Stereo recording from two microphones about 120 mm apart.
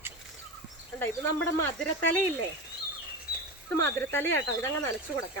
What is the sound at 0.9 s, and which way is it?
Speech, 10° left (ahead or behind).